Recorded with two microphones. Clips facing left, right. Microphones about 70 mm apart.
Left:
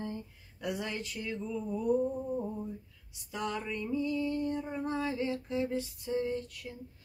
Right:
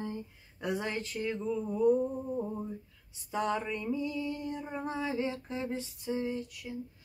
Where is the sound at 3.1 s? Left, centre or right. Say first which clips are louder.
Right 4 dB; right.